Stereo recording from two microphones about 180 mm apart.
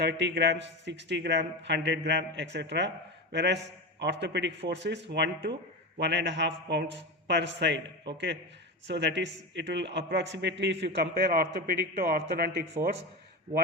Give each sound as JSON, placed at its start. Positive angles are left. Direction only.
{"t": 0.0, "sound": "a man's voice", "side_deg": -75}